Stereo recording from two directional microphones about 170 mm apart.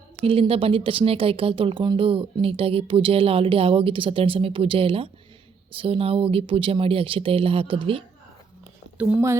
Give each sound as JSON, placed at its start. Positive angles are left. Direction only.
{"t": 0.3, "sound": "speech", "side_deg": -35}
{"t": 9.0, "sound": "speech", "side_deg": -10}